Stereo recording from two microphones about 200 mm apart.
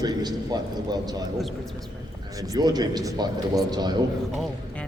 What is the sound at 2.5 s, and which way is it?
A man's voice, 20° right (ahead or behind).